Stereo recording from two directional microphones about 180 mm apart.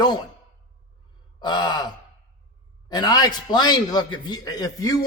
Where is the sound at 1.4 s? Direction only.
25° left (ahead or behind).